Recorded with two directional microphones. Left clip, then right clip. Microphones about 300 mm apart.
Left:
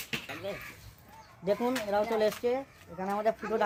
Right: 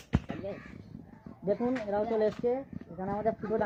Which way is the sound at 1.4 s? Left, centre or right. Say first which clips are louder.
Left 1 dB; centre.